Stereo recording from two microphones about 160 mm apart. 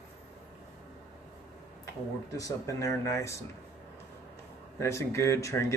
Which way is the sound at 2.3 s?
20° left (ahead or behind).